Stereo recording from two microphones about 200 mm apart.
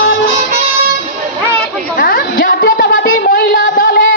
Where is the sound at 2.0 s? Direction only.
45° left (ahead or behind).